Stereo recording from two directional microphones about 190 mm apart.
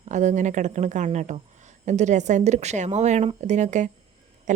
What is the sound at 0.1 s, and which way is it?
A woman's voice, 40° right (ahead or behind).